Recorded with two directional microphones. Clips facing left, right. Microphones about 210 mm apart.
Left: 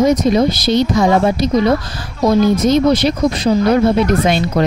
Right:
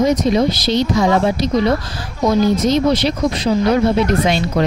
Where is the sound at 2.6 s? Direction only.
50° left (ahead or behind).